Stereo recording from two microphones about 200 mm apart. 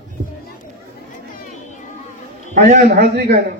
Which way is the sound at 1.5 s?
40° left (ahead or behind).